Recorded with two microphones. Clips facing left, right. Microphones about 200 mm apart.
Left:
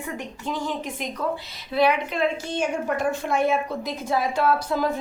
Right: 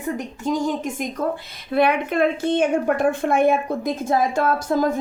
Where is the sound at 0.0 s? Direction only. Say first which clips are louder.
Right 6 dB; 40° right (ahead or behind).